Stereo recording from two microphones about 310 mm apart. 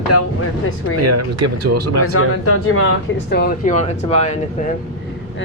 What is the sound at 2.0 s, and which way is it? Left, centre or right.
Speech, left.